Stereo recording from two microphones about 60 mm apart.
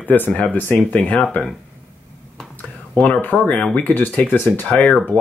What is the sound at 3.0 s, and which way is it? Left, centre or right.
Speech, left.